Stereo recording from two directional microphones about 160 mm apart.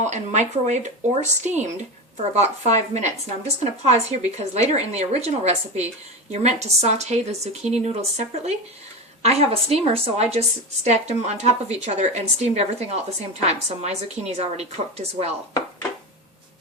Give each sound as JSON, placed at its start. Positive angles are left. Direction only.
{"t": 0.0, "sound": "a woman's voice", "side_deg": -45}